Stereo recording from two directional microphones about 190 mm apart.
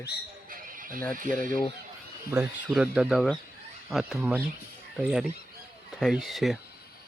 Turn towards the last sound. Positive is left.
turn(degrees=0)  # may be behind; listen again after turning